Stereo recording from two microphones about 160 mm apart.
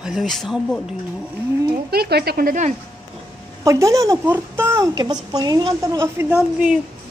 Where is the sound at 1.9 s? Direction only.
85° right; by 2.7 s 55° right (ahead or behind).